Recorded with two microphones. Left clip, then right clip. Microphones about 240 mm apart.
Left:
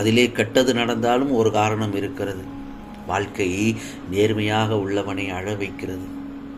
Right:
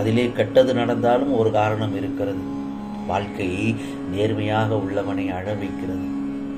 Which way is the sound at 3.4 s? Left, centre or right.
Left.